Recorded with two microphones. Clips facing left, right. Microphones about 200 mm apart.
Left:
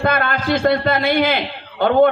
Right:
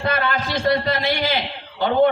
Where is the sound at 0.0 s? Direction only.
55° left (ahead or behind).